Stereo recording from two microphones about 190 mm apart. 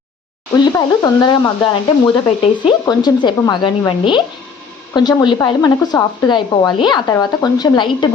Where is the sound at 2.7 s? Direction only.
25° left (ahead or behind).